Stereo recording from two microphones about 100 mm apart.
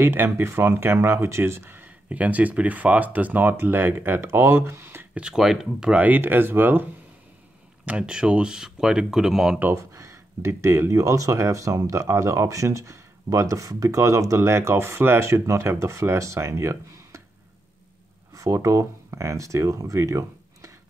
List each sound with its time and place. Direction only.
0.0 s speech: 25° right (ahead or behind)
5.2 s speech: 5° right (ahead or behind)
9.9 s speech: 30° right (ahead or behind)
18.3 s speech: 30° right (ahead or behind)